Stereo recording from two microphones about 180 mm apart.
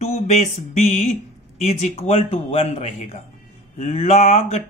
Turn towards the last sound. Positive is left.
turn(degrees=35)  # may be behind; listen again after turning